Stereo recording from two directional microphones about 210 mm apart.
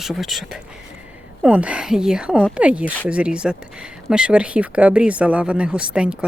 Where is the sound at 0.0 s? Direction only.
Centre (ahead or behind).